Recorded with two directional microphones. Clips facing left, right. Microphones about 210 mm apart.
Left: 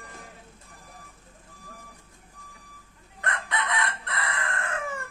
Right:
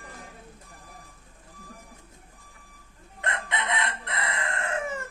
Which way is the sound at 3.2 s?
20° right (ahead or behind).